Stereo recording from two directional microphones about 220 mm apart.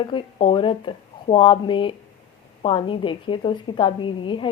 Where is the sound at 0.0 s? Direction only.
25° left (ahead or behind).